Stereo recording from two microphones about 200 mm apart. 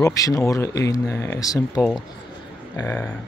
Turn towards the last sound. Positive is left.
turn(degrees=5)  # may be behind; listen again after turning